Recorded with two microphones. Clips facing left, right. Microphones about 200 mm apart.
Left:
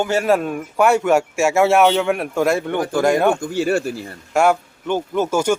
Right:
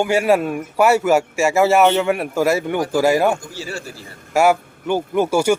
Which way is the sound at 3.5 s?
60° left (ahead or behind).